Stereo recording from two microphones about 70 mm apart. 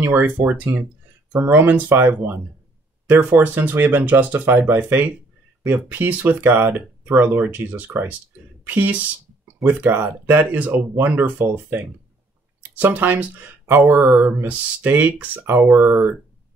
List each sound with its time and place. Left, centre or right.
0.0 s speech: right